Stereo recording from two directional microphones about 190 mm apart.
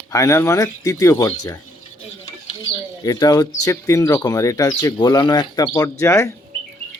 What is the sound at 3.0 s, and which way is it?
Speech, 20° left (ahead or behind).